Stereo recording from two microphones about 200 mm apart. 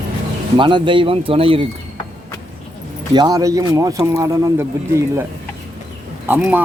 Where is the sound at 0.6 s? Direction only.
25° right (ahead or behind).